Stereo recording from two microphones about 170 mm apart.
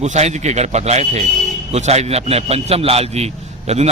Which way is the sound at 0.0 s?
40° right (ahead or behind).